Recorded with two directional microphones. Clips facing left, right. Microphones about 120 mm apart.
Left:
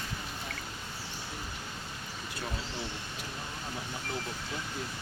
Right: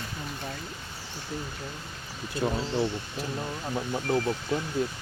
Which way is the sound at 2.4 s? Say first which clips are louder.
Right 11 dB; 40° right (ahead or behind).